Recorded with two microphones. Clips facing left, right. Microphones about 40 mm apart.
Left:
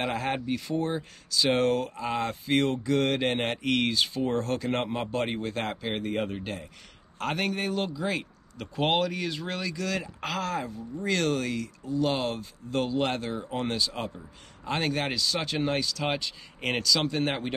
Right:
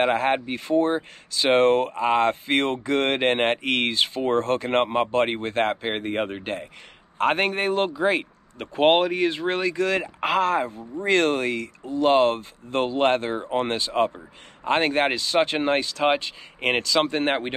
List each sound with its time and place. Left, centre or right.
0.0 s speech: right